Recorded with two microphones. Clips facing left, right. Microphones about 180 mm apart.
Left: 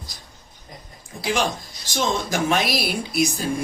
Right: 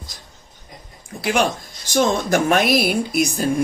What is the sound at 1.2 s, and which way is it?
Speech, 65° right (ahead or behind).